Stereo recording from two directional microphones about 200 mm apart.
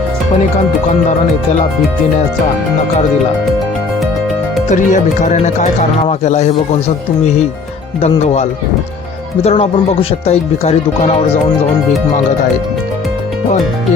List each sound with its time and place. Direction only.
4.7 s speech: 40° left (ahead or behind)
8.0 s speech: 30° left (ahead or behind)